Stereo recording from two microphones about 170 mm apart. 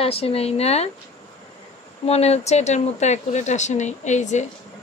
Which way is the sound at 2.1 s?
40° left (ahead or behind).